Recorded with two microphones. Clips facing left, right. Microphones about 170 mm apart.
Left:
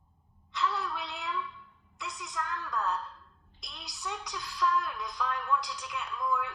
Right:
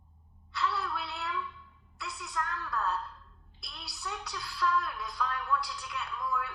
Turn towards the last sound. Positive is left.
turn(degrees=20)  # may be behind; listen again after turning